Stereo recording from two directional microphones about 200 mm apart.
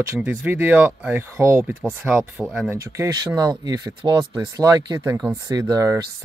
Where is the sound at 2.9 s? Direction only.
15° right (ahead or behind).